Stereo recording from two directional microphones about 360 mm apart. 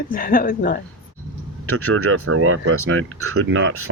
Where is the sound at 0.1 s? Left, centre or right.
Left.